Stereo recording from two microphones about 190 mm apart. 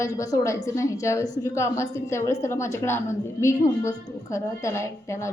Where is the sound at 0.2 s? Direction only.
15° left (ahead or behind).